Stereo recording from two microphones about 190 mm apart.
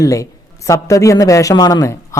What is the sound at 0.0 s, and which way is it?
A man's voice, 15° left (ahead or behind).